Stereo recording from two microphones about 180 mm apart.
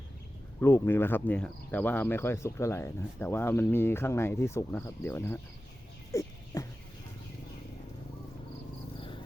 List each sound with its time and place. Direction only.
0.6 s speech: 10° left (ahead or behind)
6.1 s a sound: 20° left (ahead or behind)
9.0 s insect: 30° left (ahead or behind)